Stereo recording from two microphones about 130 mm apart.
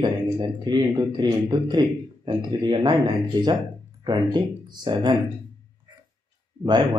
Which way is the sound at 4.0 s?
35° right (ahead or behind).